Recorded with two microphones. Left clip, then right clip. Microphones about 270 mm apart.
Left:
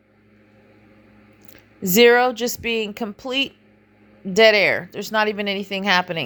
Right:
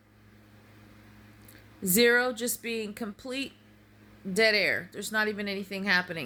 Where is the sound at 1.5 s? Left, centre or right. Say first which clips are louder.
Left 9 dB; centre.